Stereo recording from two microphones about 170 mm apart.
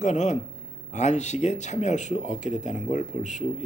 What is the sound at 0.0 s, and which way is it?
Speech, 45° left (ahead or behind).